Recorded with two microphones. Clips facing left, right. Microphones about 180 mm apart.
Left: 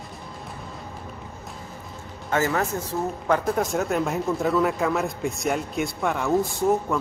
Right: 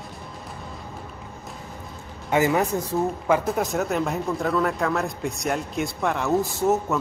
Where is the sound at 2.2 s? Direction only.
15° right (ahead or behind).